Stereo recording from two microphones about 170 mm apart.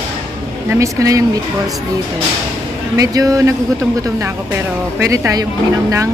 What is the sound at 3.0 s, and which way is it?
Speech, 20° right (ahead or behind).